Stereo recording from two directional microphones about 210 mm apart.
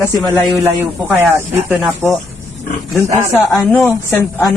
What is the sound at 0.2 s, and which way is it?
Speech, centre (ahead or behind).